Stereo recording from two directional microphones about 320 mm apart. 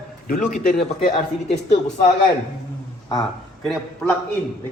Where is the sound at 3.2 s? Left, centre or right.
Centre.